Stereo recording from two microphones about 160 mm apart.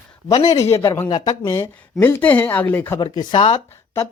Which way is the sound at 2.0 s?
10° left (ahead or behind).